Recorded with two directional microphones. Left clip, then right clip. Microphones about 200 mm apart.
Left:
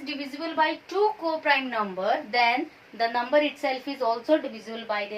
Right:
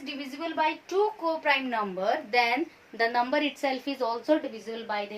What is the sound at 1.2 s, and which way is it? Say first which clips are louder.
A woman's voice: left 2 dB; 45° right (ahead or behind).